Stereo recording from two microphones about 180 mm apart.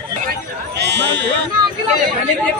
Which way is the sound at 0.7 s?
70° right (ahead or behind).